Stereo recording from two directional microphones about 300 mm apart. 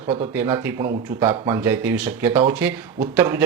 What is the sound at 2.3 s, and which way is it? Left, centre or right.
Speech, centre.